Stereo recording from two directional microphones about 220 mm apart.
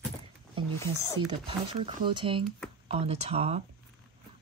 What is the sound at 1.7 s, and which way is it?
Speech, 25° right (ahead or behind).